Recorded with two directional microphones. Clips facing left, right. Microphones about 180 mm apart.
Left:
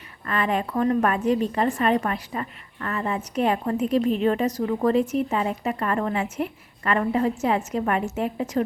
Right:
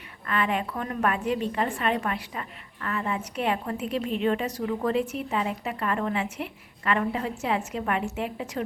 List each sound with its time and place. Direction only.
0.3 s a woman's voice: 40° left (ahead or behind)